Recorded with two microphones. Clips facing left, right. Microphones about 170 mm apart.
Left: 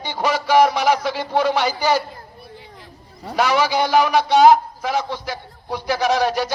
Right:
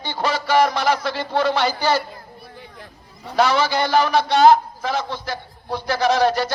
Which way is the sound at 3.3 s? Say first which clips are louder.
Even; 10° left (ahead or behind).